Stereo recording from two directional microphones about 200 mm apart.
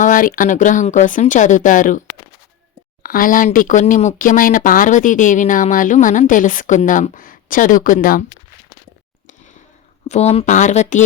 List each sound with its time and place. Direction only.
0.0 s speech: 45° left (ahead or behind)
3.0 s speech: 45° left (ahead or behind)
10.1 s speech: 30° left (ahead or behind)